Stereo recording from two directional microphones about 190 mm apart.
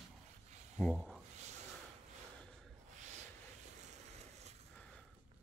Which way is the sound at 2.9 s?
40° right (ahead or behind).